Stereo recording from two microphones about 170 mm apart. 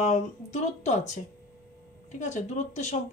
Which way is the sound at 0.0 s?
45° left (ahead or behind).